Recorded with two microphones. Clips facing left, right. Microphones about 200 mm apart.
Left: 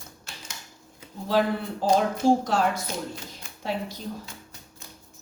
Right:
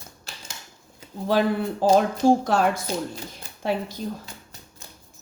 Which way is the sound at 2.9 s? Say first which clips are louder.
Right 5 dB; 35° right (ahead or behind).